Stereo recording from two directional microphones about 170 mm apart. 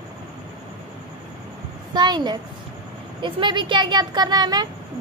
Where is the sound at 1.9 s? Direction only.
25° right (ahead or behind).